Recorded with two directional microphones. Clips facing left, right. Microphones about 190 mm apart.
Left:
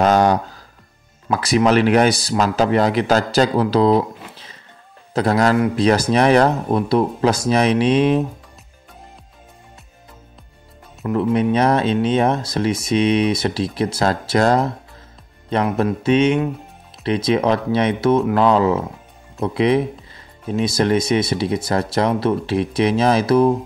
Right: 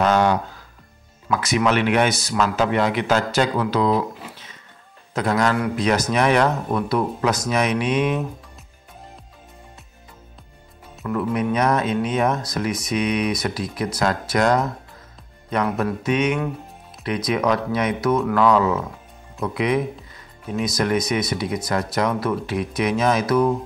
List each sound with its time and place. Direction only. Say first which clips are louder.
0.0 s speech: left 3 dB; 40° left (ahead or behind)
11.1 s speech: left 5 dB; 25° left (ahead or behind)